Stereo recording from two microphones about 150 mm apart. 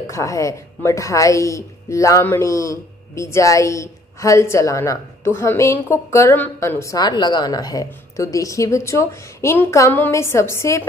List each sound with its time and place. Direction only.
0.1 s a woman's voice: 20° left (ahead or behind)